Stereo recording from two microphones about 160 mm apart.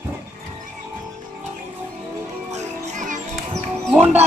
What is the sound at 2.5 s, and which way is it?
Music, 50° right (ahead or behind).